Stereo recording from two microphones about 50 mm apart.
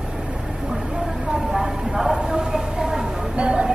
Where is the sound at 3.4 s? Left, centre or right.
Right.